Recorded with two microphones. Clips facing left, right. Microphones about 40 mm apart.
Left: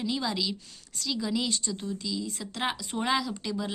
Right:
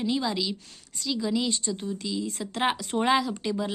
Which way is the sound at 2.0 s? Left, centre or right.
Right.